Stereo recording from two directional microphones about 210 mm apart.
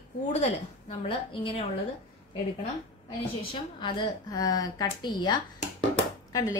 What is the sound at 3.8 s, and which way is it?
Speech, 20° left (ahead or behind).